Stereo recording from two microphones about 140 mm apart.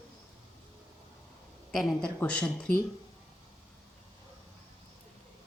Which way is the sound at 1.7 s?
Centre (ahead or behind).